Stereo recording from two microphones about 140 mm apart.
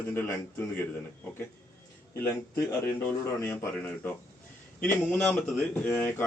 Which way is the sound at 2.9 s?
15° left (ahead or behind).